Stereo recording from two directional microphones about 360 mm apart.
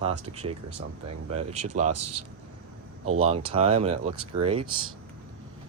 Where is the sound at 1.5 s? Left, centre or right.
Right.